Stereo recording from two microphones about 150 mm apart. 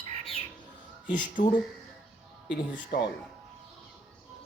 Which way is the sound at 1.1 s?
60° left (ahead or behind).